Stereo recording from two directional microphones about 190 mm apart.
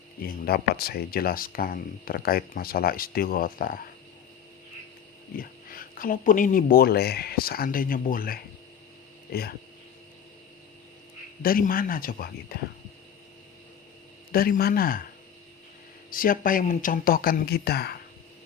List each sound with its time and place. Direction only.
0.2 s speech: 55° left (ahead or behind)
5.4 s speech: 50° left (ahead or behind)
11.4 s speech: 50° left (ahead or behind)
14.3 s speech: 50° left (ahead or behind)
16.0 s speech: 50° left (ahead or behind)